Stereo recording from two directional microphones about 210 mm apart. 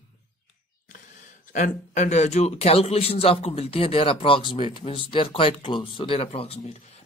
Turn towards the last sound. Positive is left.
turn(degrees=30)  # may be behind; listen again after turning